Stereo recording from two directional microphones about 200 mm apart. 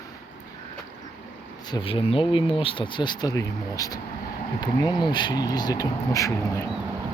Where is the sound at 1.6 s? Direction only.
25° left (ahead or behind).